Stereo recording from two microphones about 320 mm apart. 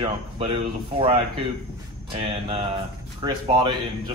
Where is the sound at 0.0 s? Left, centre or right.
Centre.